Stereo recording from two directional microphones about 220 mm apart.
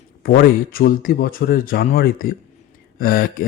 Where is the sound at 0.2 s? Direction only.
40° left (ahead or behind).